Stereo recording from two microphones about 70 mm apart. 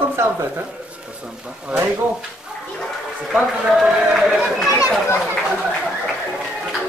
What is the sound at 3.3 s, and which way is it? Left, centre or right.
Speech, centre.